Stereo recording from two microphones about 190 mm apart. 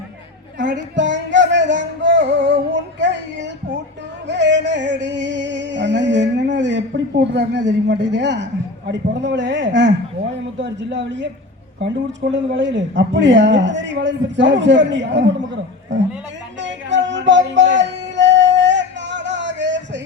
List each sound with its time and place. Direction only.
0.9 s music: 70° right (ahead or behind)
8.9 s a woman's voice: 70° right (ahead or behind)
12.3 s a woman's voice: 70° right (ahead or behind)
16.6 s a sound: 70° right (ahead or behind)